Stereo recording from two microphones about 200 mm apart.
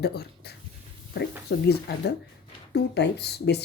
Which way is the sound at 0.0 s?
55° left (ahead or behind).